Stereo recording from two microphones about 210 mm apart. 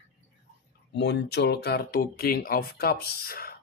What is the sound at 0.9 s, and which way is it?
Speech, 55° left (ahead or behind).